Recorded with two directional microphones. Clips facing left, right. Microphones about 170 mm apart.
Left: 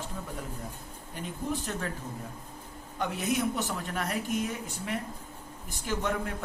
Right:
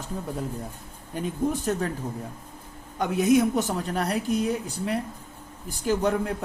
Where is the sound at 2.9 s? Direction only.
45° right (ahead or behind).